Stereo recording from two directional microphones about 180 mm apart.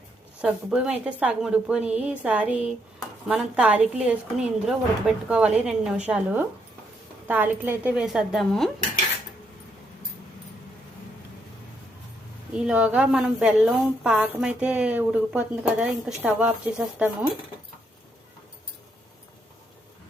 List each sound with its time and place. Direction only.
0.4 s a woman's voice: 5° right (ahead or behind)
12.5 s a woman's voice: 5° right (ahead or behind)